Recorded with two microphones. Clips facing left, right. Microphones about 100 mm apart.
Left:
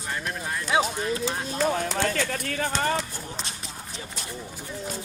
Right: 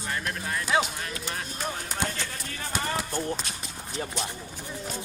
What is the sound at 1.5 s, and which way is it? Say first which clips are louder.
Speech: left 9 dB; 90° left.